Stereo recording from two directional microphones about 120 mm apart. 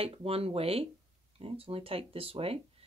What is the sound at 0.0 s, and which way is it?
Speech, 55° right (ahead or behind).